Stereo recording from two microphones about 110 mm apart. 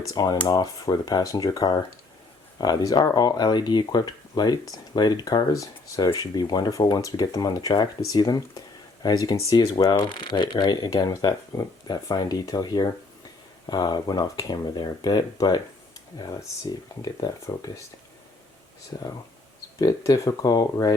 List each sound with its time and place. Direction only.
0.1 s speech: 35° left (ahead or behind)
18.9 s speech: 35° left (ahead or behind)